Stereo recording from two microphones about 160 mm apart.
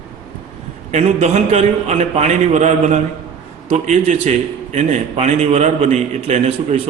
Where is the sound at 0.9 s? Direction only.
45° right (ahead or behind).